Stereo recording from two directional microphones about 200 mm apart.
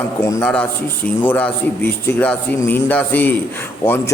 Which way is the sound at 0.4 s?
5° left (ahead or behind).